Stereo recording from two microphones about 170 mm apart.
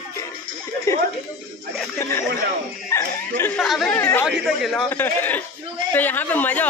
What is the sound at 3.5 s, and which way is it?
Speech, centre (ahead or behind).